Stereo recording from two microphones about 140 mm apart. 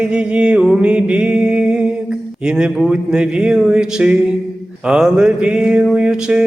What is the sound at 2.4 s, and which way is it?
Mantra, 5° right (ahead or behind).